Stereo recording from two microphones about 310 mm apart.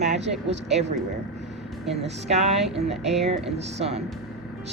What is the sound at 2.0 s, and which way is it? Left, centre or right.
Speech, right.